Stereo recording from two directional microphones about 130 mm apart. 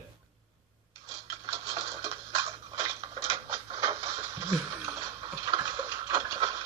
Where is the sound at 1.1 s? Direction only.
25° right (ahead or behind).